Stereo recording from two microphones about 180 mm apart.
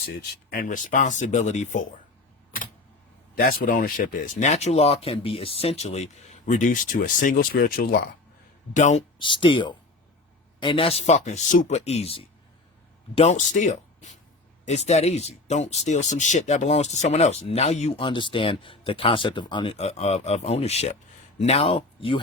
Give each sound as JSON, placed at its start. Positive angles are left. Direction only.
{"t": 0.0, "sound": "speech", "side_deg": 55}
{"t": 3.3, "sound": "speech", "side_deg": 55}
{"t": 8.7, "sound": "speech", "side_deg": 40}
{"t": 9.1, "sound": "speech", "side_deg": 25}